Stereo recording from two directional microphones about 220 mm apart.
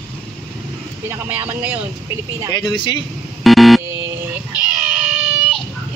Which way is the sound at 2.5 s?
20° left (ahead or behind).